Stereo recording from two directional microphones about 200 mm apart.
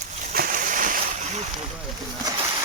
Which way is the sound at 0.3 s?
45° right (ahead or behind).